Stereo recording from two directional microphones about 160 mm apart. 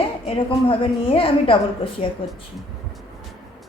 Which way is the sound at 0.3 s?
35° left (ahead or behind).